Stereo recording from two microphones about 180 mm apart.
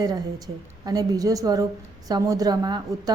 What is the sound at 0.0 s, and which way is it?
A woman's voice, 20° right (ahead or behind).